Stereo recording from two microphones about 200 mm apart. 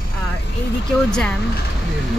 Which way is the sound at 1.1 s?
5° left (ahead or behind).